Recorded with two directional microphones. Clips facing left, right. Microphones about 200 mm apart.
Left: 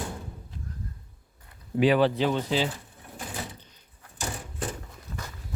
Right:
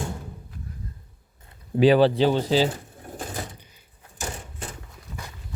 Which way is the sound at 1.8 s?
30° right (ahead or behind).